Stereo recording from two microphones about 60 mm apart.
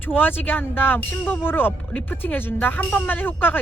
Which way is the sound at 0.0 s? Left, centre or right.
Left.